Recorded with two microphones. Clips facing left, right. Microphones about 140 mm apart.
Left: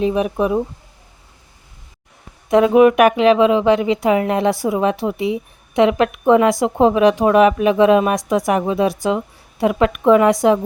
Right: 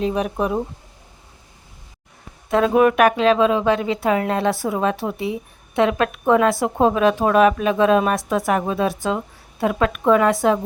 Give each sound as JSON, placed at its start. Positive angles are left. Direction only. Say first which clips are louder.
{"t": 0.0, "sound": "speech", "louder": "left 4 dB", "side_deg": 5}
{"t": 2.5, "sound": "speech", "louder": "left 5 dB", "side_deg": 15}